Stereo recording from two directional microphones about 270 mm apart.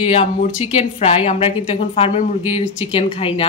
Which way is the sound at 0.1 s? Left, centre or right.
Left.